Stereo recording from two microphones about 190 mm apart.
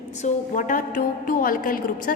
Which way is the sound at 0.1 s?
40° left (ahead or behind).